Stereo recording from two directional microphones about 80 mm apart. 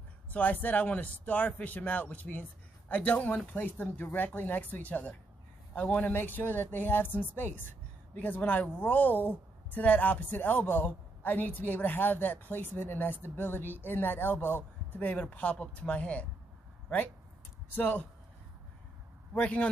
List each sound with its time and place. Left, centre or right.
0.3 s speech: centre
17.7 s speech: left
19.3 s speech: centre